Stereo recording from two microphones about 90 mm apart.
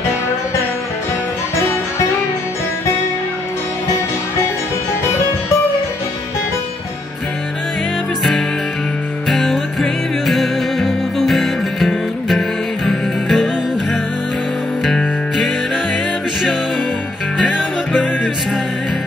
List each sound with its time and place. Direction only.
9.3 s music: 5° left (ahead or behind)
14.9 s music: 5° left (ahead or behind)
17.4 s music: 5° right (ahead or behind)